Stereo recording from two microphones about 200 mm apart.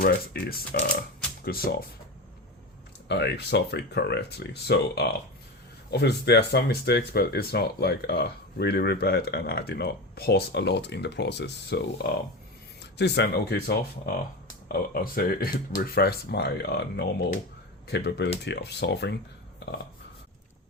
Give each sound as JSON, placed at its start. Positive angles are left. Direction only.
{"t": 0.7, "sound": "speech", "side_deg": 50}
{"t": 3.1, "sound": "speech", "side_deg": 55}